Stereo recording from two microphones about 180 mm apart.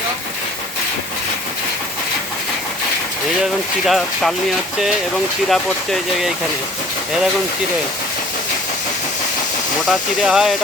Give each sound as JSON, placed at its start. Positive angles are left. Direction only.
{"t": 3.8, "sound": "speech", "side_deg": 0}
{"t": 5.5, "sound": "speech", "side_deg": 0}
{"t": 9.9, "sound": "speech", "side_deg": 0}